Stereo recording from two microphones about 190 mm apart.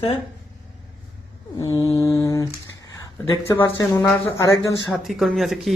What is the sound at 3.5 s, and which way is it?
Speech, 15° left (ahead or behind).